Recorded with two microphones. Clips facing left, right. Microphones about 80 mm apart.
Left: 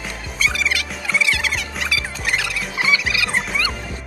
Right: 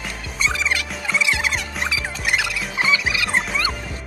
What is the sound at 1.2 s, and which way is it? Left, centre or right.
Music, right.